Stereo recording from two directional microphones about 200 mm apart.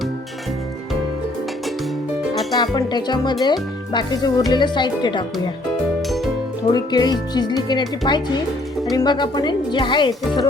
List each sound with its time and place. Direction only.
2.3 s music: centre (ahead or behind)
2.6 s speech: 20° left (ahead or behind)
6.7 s speech: 20° left (ahead or behind)